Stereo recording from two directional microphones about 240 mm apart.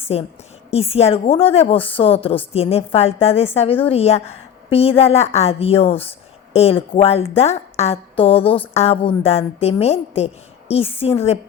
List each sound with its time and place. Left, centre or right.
0.1 s a woman's voice: left